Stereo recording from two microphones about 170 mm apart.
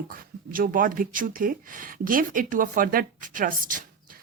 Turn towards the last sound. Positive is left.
turn(degrees=-50)  # may be behind; listen again after turning